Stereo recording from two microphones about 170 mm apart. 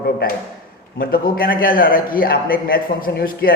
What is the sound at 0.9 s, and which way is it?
Speech, 60° left (ahead or behind).